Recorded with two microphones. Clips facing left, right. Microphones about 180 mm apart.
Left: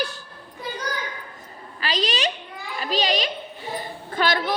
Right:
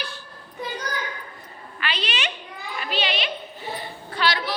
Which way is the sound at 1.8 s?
35° left (ahead or behind).